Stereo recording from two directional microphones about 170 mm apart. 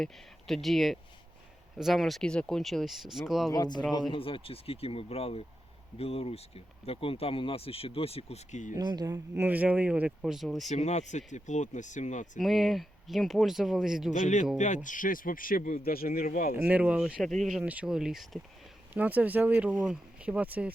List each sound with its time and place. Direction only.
0.0 s speech: centre (ahead or behind)
3.5 s speech: 25° left (ahead or behind); by 8.7 s 40° left (ahead or behind)
8.7 s speech: 25° right (ahead or behind); by 10.7 s centre (ahead or behind)
10.7 s speech: 45° left (ahead or behind)
12.4 s speech: centre (ahead or behind)
14.1 s speech: 45° left (ahead or behind)
16.6 s speech: 5° right (ahead or behind)